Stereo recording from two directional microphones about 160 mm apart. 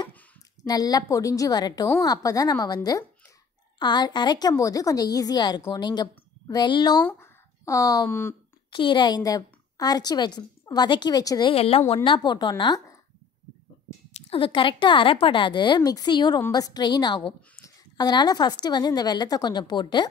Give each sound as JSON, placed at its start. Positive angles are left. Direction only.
{"t": 0.7, "sound": "a woman's voice", "side_deg": 25}
{"t": 7.0, "sound": "speech", "side_deg": 5}
{"t": 7.6, "sound": "a woman's voice", "side_deg": 20}
{"t": 8.6, "sound": "a woman's voice", "side_deg": 30}
{"t": 14.3, "sound": "a woman's voice", "side_deg": 30}